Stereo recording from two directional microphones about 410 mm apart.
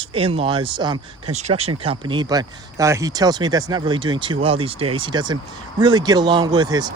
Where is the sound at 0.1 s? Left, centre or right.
Centre.